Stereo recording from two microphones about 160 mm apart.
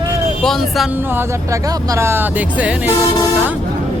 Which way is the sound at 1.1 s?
15° right (ahead or behind).